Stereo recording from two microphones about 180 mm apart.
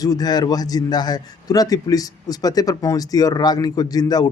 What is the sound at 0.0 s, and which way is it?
Speech, 20° left (ahead or behind).